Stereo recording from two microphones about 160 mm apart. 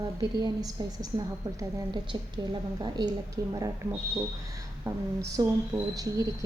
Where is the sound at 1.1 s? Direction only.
35° right (ahead or behind).